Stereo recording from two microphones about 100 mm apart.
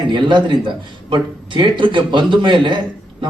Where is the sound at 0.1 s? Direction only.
50° right (ahead or behind).